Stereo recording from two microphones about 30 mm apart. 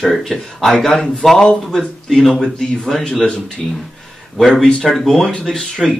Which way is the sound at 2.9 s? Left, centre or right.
Centre.